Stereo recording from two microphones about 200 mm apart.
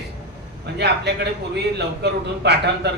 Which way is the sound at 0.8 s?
55° right (ahead or behind).